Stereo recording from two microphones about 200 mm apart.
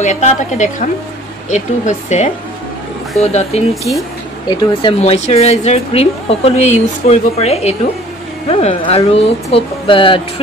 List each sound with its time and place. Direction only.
0.0 s speech: 35° left (ahead or behind)